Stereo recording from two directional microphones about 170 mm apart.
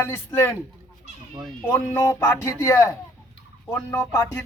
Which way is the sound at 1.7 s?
15° left (ahead or behind).